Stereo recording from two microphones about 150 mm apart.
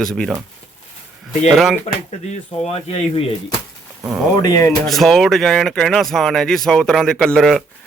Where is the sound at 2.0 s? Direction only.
45° left (ahead or behind).